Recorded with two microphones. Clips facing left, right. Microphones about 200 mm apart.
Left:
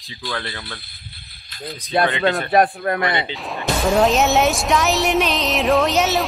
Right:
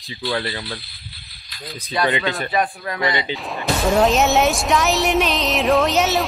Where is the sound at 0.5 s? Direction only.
55° left (ahead or behind).